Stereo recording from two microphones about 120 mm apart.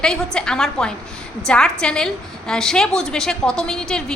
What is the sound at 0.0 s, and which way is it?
A woman's voice, 5° left (ahead or behind).